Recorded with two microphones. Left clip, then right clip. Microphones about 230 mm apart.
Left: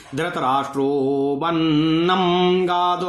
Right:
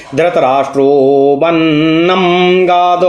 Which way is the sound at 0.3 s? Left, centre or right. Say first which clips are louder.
Right 8 dB; left.